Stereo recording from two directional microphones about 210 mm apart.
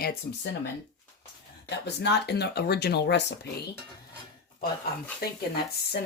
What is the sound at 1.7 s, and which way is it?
Speech, 55° left (ahead or behind).